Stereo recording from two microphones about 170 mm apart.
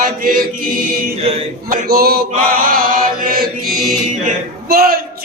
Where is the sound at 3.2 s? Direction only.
60° right (ahead or behind).